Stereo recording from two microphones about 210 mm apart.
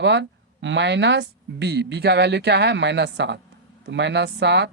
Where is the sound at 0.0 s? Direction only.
60° right (ahead or behind).